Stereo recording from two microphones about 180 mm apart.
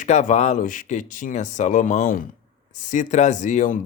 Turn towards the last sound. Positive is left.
turn(degrees=45)  # may be behind; listen again after turning